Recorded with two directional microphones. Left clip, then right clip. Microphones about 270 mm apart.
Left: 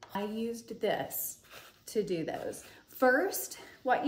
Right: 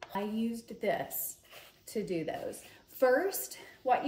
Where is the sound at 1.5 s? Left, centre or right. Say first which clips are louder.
Left 5 dB; centre.